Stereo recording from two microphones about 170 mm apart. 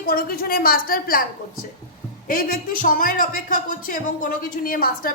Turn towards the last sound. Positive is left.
turn(degrees=60)  # may be behind; listen again after turning